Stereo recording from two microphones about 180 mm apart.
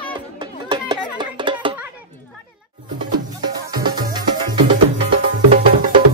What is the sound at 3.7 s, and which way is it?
Music, 25° right (ahead or behind).